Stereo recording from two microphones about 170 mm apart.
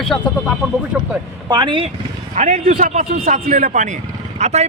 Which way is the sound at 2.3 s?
45° right (ahead or behind).